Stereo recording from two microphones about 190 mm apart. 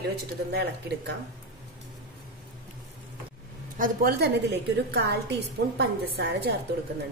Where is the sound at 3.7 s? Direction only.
55° right (ahead or behind).